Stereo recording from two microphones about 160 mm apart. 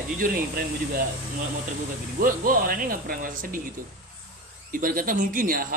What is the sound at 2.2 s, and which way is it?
Speech, 60° right (ahead or behind).